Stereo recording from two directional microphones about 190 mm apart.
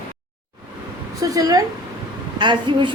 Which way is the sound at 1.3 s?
20° right (ahead or behind).